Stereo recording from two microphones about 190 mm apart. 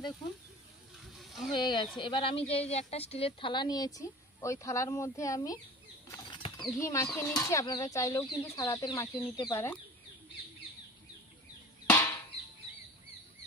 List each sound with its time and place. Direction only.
1.1 s a sound: centre (ahead or behind)
1.5 s a woman's voice: 25° left (ahead or behind)
6.0 s bird flight: 15° left (ahead or behind)
6.3 s speech: 25° left (ahead or behind)
11.9 s drum: 10° left (ahead or behind)